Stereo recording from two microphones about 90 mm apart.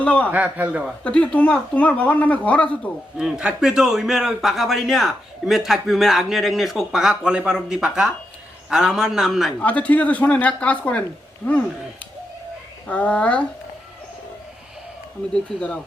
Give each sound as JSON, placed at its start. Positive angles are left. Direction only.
{"t": 0.0, "sound": "a man's voice", "side_deg": 15}
{"t": 0.3, "sound": "a man's voice", "side_deg": -15}
{"t": 1.0, "sound": "speech", "side_deg": 15}
{"t": 3.2, "sound": "a man's voice", "side_deg": -10}
{"t": 9.6, "sound": "speech", "side_deg": 15}
{"t": 12.9, "sound": "speech", "side_deg": 15}
{"t": 15.3, "sound": "speech", "side_deg": 15}